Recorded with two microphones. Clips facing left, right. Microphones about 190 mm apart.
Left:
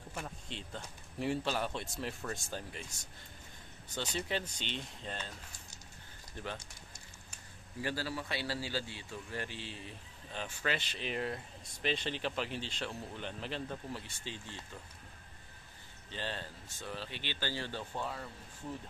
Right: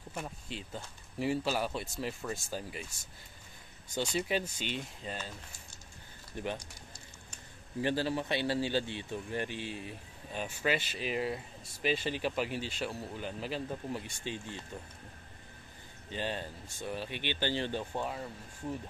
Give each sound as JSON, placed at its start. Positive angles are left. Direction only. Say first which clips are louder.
{"t": 0.1, "sound": "speech", "louder": "right 3 dB", "side_deg": -5}
{"t": 6.3, "sound": "speech", "louder": "right 5 dB", "side_deg": -15}
{"t": 7.8, "sound": "speech", "louder": "right 6 dB", "side_deg": -25}
{"t": 16.1, "sound": "speech", "louder": "right 5 dB", "side_deg": -15}